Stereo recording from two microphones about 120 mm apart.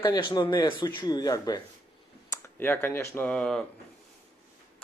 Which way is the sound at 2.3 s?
20° left (ahead or behind).